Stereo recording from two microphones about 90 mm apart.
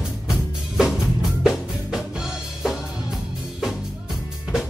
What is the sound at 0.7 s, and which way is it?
Music, 5° right (ahead or behind).